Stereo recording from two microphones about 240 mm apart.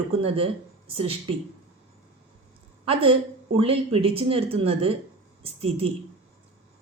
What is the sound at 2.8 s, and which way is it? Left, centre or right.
A woman's voice, right.